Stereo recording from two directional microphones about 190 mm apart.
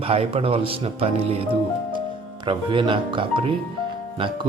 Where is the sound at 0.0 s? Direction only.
30° right (ahead or behind).